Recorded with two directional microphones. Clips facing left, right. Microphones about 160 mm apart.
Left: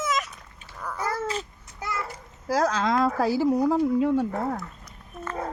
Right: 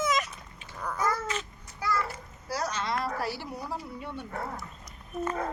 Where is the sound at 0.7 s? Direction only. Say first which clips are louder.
Even; 5° left (ahead or behind).